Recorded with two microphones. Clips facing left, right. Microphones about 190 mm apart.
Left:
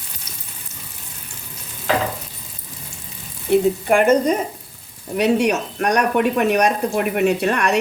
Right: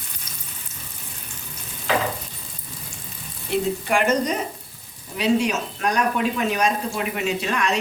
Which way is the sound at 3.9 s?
50° left (ahead or behind).